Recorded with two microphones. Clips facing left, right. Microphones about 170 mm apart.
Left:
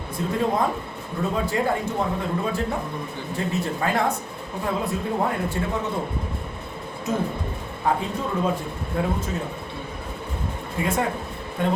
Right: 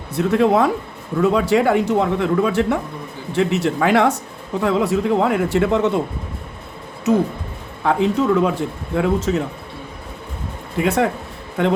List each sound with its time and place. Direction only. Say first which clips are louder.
0.2 s speech: right 8 dB; 75° right (ahead or behind)
7.9 s speech: right 8 dB; 75° right (ahead or behind)
10.8 s speech: right 6 dB; 75° right (ahead or behind)